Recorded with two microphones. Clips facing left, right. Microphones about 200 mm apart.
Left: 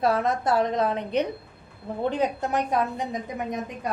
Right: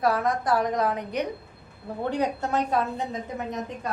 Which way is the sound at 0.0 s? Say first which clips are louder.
Left 1 dB; 25° left (ahead or behind).